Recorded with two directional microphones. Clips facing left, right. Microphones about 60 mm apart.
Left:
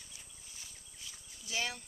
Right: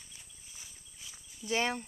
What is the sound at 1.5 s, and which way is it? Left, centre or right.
Speech, right.